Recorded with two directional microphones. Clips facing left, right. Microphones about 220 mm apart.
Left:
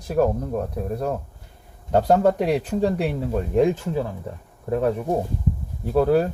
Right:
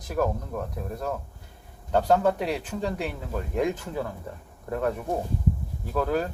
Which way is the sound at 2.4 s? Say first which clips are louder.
Left 8 dB; 40° left (ahead or behind).